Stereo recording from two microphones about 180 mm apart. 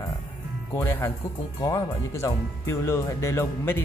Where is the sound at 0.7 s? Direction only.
10° left (ahead or behind).